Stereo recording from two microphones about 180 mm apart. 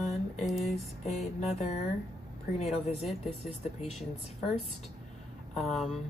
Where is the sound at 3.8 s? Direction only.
Centre (ahead or behind).